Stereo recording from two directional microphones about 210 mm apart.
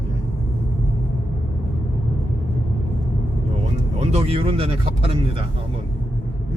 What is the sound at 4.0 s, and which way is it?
Speech, 30° right (ahead or behind).